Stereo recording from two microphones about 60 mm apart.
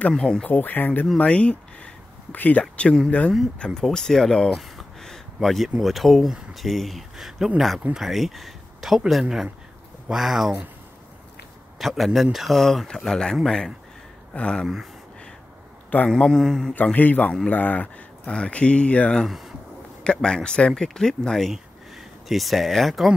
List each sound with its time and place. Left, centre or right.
0.1 s speech: centre
0.5 s speech: left
1.1 s speech: centre
2.3 s speech: left
2.8 s speech: centre
4.6 s a sound: centre
5.8 s speech: centre
11.8 s speech: centre
16.1 s speech: centre
16.7 s speech: left
19.2 s speech: centre
20.0 s speech: centre